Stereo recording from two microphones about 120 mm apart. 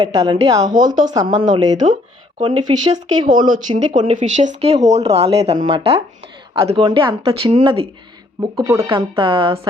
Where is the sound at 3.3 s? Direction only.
85° right; by 5.6 s 60° right (ahead or behind).